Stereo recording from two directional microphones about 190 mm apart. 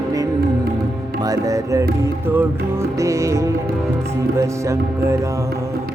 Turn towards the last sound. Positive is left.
turn(degrees=-15)  # may be behind; listen again after turning